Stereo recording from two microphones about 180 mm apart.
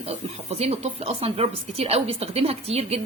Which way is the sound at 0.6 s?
35° right (ahead or behind).